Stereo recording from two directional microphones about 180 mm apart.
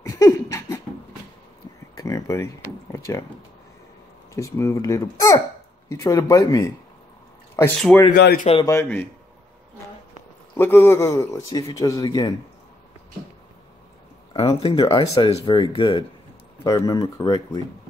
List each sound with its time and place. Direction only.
0.0 s a sound: 15° left (ahead or behind)
2.0 s a sound: 20° left (ahead or behind)
4.3 s speech: 15° left (ahead or behind)
8.1 s speech: 55° left (ahead or behind)
8.6 s speech: 15° left (ahead or behind)
10.5 s speech: 15° left (ahead or behind)
14.4 s speech: 35° left (ahead or behind)